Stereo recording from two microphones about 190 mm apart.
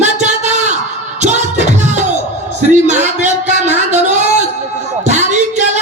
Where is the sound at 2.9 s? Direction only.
40° right (ahead or behind).